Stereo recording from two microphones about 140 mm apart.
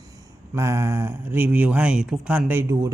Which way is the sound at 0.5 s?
20° right (ahead or behind).